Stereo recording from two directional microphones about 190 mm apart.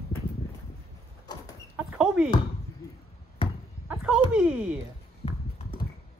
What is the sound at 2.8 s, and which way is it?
Basketball bounce, 20° left (ahead or behind).